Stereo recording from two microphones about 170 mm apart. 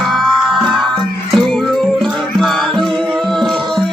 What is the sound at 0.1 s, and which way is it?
Music, centre (ahead or behind).